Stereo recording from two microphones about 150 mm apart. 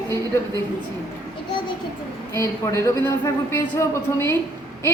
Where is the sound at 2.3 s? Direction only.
20° left (ahead or behind).